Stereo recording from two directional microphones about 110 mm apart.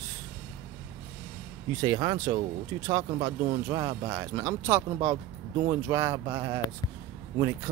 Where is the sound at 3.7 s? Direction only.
35° right (ahead or behind).